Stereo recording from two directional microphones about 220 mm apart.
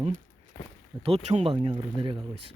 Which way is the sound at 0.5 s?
10° left (ahead or behind).